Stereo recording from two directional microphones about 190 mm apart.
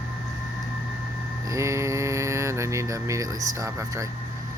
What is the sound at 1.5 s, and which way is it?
Music, 15° right (ahead or behind).